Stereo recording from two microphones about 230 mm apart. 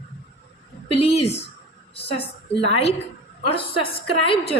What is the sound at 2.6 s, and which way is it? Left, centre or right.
A woman's voice, left.